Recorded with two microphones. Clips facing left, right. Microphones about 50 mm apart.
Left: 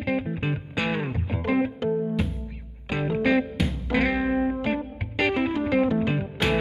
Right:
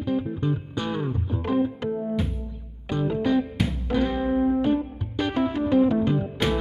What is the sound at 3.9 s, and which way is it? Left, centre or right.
Music, left.